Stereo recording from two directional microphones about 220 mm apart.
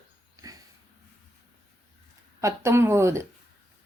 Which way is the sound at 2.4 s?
15° right (ahead or behind).